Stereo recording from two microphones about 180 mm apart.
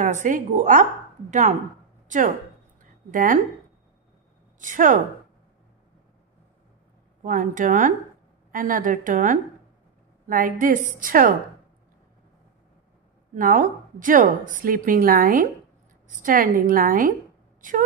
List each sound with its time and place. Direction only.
0.0 s a woman's voice: 45° right (ahead or behind)
2.0 s speech: 45° right (ahead or behind)
2.8 s a sound: 50° right (ahead or behind)
4.6 s a woman's voice: 45° right (ahead or behind)
7.2 s a woman's voice: 45° right (ahead or behind)
13.3 s a woman's voice: 45° right (ahead or behind)